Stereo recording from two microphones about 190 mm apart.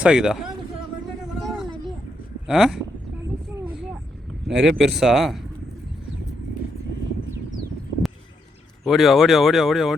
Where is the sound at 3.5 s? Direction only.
5° right (ahead or behind).